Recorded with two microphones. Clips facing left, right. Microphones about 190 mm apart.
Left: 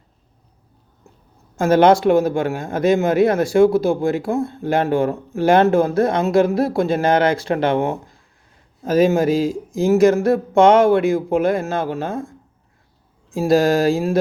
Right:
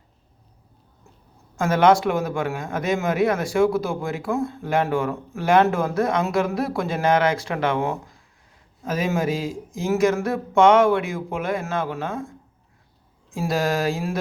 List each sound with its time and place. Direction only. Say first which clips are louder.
1.5 s speech: left 4 dB; 30° left (ahead or behind)
13.3 s speech: left 8 dB; 35° left (ahead or behind)